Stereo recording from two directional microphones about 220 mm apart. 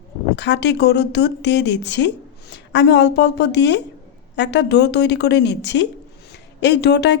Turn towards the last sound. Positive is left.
turn(degrees=50)  # may be behind; listen again after turning